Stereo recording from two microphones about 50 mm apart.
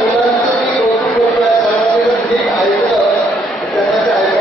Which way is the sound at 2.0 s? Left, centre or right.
Centre.